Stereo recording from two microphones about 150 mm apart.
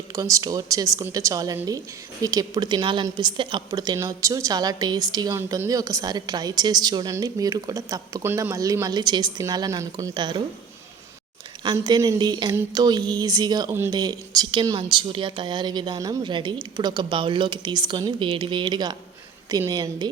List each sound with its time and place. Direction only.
0.1 s a woman's voice: 20° right (ahead or behind)
11.6 s a woman's voice: 30° right (ahead or behind)